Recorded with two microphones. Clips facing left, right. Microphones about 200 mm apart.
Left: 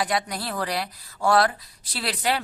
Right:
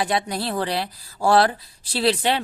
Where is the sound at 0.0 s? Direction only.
25° right (ahead or behind).